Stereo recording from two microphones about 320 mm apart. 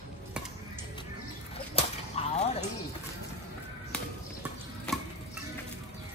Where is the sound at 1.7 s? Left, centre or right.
Centre.